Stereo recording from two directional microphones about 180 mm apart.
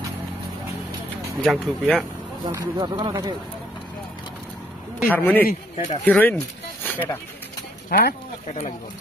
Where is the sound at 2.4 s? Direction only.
20° right (ahead or behind).